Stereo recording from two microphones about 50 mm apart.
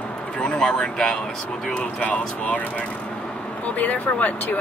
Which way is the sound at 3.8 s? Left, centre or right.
Left.